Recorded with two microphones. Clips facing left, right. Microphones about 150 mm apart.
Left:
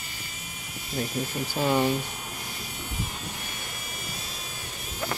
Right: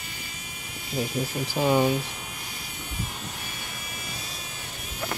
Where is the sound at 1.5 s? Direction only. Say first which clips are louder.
Right 2 dB; 10° right (ahead or behind).